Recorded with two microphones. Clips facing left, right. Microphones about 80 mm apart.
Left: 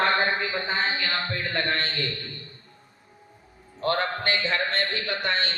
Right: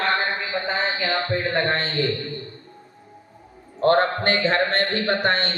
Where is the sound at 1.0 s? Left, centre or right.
Right.